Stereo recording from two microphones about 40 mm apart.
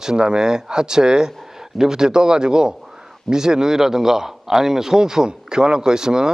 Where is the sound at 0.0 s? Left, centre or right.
Centre.